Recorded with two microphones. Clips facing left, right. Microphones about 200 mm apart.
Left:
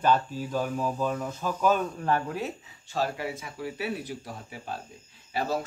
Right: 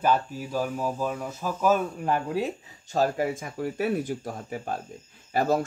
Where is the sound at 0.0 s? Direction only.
10° right (ahead or behind).